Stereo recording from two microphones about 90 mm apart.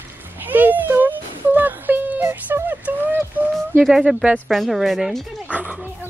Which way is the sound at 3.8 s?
5° right (ahead or behind).